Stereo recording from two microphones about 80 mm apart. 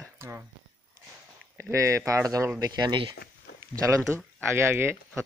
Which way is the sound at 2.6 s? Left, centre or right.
Right.